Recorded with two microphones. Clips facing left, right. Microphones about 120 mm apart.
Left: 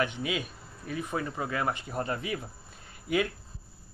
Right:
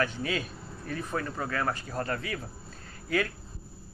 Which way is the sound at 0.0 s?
15° left (ahead or behind).